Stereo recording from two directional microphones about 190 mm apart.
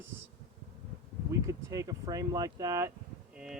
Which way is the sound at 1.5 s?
20° right (ahead or behind).